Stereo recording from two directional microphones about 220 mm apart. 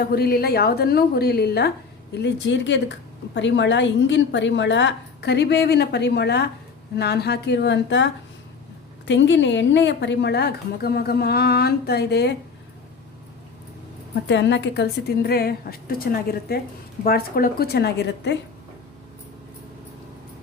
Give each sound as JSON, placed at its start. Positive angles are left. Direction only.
{"t": 0.1, "sound": "a woman's voice", "side_deg": 45}
{"t": 14.3, "sound": "a woman's voice", "side_deg": 55}